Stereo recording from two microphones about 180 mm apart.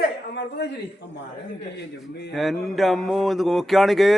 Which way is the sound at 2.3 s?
Centre (ahead or behind).